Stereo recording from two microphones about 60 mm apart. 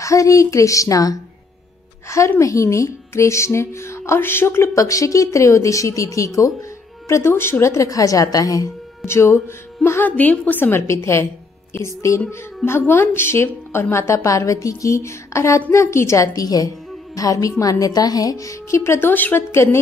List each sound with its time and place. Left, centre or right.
0.0 s speech: left
2.0 s a child's voice: left
4.7 s speech: left
7.1 s speech: left
7.6 s a woman's voice: left
9.0 s a woman's voice: left
10.0 s a woman's voice: left
10.7 s a woman's voice: left
12.6 s a woman's voice: left
16.3 s a woman's voice: left
19.5 s a woman's voice: left